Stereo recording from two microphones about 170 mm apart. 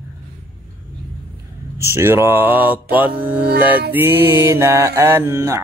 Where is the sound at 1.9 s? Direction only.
15° right (ahead or behind).